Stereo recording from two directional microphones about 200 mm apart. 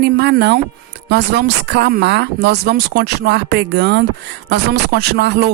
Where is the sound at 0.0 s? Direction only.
55° right (ahead or behind).